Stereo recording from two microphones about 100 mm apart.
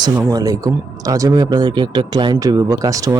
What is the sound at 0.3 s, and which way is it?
Speech, 35° right (ahead or behind).